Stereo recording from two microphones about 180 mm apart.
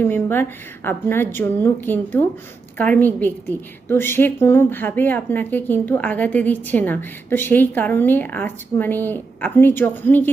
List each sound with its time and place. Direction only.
0.0 s a woman's voice: 10° left (ahead or behind)